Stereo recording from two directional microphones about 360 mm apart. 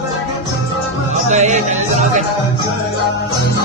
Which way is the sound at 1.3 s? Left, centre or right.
Centre.